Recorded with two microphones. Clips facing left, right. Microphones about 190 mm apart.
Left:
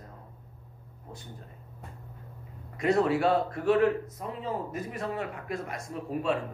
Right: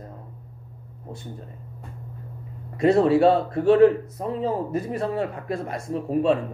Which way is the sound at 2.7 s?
30° right (ahead or behind).